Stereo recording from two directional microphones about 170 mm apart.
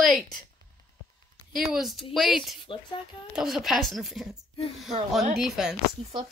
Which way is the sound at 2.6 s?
30° left (ahead or behind).